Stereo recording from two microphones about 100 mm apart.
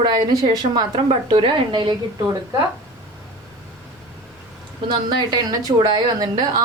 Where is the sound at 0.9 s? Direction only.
60° right (ahead or behind).